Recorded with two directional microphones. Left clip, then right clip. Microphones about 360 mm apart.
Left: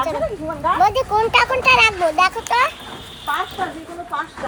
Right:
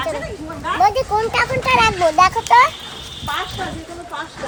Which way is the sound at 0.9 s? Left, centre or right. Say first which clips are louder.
Even; centre.